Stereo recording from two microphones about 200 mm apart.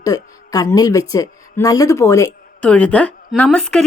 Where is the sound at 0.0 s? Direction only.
20° left (ahead or behind).